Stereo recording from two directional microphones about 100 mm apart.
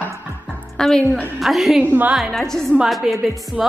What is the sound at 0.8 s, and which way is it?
A woman's voice, 5° left (ahead or behind).